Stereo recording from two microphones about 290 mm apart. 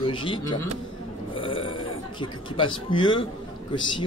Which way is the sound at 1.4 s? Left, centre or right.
Centre.